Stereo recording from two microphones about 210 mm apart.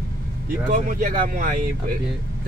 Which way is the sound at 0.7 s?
40° right (ahead or behind).